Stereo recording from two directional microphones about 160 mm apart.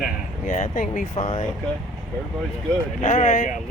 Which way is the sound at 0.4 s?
50° left (ahead or behind).